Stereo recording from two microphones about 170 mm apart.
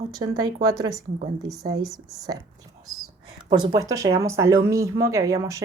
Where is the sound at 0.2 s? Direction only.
20° right (ahead or behind).